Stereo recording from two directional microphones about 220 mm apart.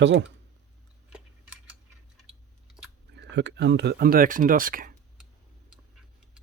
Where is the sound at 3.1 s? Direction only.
50° right (ahead or behind).